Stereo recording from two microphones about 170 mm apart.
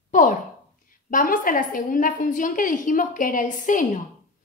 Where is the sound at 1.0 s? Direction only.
55° left (ahead or behind).